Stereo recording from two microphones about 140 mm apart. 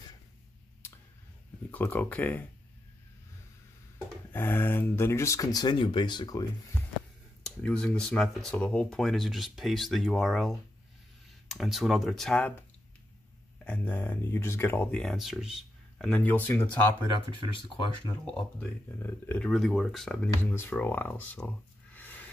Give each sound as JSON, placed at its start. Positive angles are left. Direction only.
{"t": 0.8, "sound": "a sound", "side_deg": 15}
{"t": 1.7, "sound": "speech", "side_deg": 15}
{"t": 4.3, "sound": "speech", "side_deg": 15}
{"t": 7.4, "sound": "speech", "side_deg": 5}
{"t": 13.7, "sound": "speech", "side_deg": 15}
{"t": 16.2, "sound": "speech", "side_deg": 15}
{"t": 18.2, "sound": "speech", "side_deg": 15}
{"t": 21.9, "sound": "a sound", "side_deg": 15}